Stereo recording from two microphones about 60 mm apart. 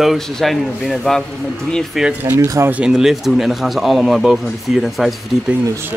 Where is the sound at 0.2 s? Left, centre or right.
Centre.